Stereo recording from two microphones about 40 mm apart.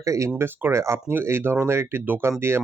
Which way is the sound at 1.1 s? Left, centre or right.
Right.